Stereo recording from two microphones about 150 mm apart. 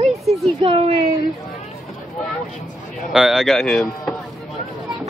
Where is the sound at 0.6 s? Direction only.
40° right (ahead or behind).